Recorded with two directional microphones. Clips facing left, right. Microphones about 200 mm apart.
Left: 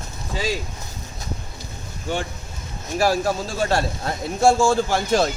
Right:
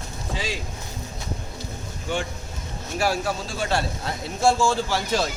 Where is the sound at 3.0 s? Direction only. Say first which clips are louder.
Left 4 dB; 40° left (ahead or behind).